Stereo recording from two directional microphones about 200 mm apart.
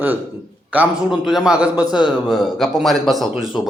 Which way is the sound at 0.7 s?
5° right (ahead or behind).